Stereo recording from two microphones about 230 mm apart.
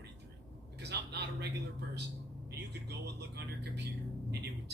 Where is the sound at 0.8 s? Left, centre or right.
Right.